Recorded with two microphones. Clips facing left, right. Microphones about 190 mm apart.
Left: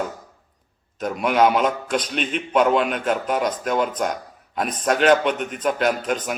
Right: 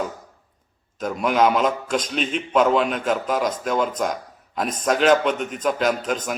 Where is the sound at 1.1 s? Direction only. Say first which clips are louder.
Left 1 dB; centre (ahead or behind).